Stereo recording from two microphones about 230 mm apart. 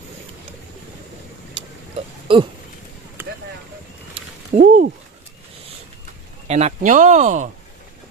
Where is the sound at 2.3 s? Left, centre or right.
Right.